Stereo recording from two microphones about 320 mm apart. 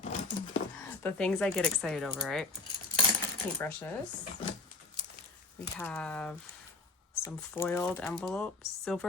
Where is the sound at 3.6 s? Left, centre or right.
Centre.